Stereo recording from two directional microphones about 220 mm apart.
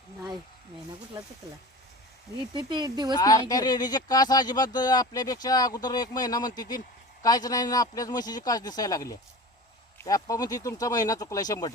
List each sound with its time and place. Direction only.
2.5 s speech: 20° right (ahead or behind)
3.2 s speech: 15° left (ahead or behind)